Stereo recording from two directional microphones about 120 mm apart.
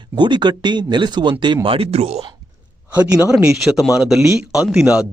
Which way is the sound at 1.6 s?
50° right (ahead or behind).